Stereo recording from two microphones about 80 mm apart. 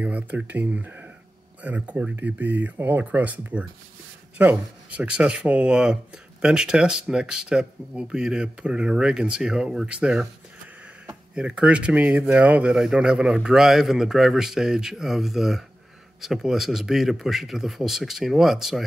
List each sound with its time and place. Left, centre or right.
0.0 s speech: centre